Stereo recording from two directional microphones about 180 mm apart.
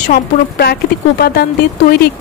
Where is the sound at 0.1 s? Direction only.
60° left (ahead or behind).